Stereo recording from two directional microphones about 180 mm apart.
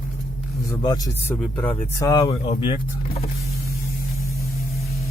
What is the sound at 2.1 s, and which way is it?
Speech, 20° left (ahead or behind).